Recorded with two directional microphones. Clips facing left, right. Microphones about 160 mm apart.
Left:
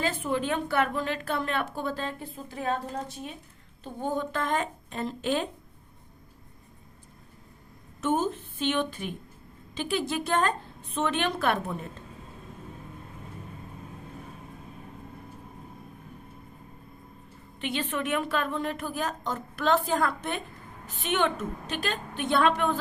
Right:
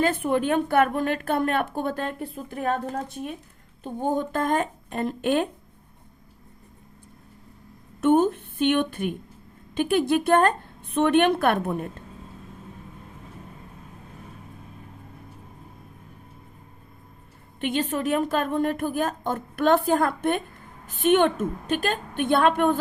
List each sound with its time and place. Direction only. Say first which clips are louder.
0.0 s a woman's voice: right 6 dB; 55° right (ahead or behind)
8.0 s a woman's voice: right 8 dB; 60° right (ahead or behind)
17.6 s a woman's voice: right 5 dB; 45° right (ahead or behind)